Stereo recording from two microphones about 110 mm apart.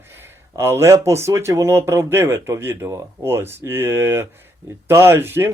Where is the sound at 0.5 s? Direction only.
25° right (ahead or behind).